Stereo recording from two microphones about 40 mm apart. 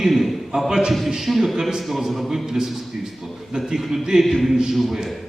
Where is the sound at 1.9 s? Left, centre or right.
Centre.